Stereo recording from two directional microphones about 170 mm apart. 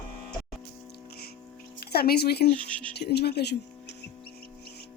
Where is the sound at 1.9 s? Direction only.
65° left (ahead or behind).